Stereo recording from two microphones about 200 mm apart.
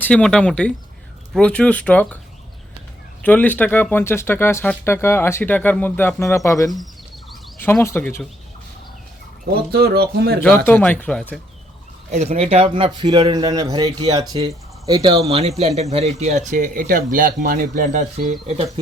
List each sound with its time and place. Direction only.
0.0 s speech: 5° left (ahead or behind)
3.2 s speech: 10° left (ahead or behind)
9.7 s speech: 50° right (ahead or behind)
10.7 s speech: 10° left (ahead or behind)
12.1 s speech: 35° right (ahead or behind)